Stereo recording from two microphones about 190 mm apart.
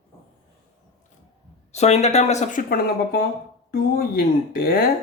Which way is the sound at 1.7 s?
35° left (ahead or behind).